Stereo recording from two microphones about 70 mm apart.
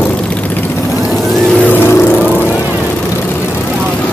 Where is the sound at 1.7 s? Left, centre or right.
Left.